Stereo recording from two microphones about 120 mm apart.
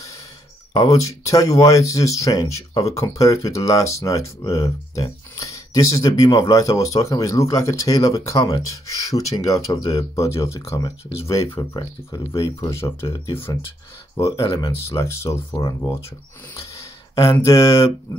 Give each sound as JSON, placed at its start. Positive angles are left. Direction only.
{"t": 0.7, "sound": "speech", "side_deg": 30}
{"t": 14.4, "sound": "speech", "side_deg": 45}
{"t": 14.9, "sound": "speech", "side_deg": 25}
{"t": 17.1, "sound": "speech", "side_deg": 25}